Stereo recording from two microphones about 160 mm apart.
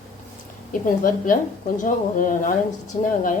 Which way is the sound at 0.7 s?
60° left (ahead or behind).